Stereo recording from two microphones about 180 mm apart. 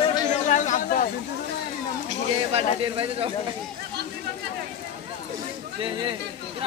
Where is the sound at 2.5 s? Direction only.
30° right (ahead or behind).